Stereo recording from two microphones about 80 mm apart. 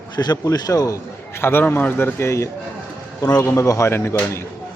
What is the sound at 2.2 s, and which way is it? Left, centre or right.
Speech, left.